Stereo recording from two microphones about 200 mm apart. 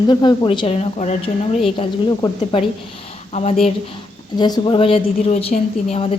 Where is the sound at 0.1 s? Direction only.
20° left (ahead or behind).